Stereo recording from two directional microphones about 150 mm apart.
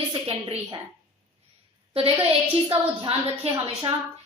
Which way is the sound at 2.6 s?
35° right (ahead or behind).